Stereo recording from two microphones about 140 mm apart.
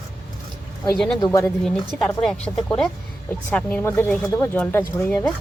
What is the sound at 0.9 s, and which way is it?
Speech, 5° left (ahead or behind).